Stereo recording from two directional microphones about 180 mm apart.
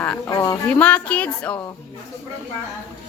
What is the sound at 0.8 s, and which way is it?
Speech, 5° left (ahead or behind).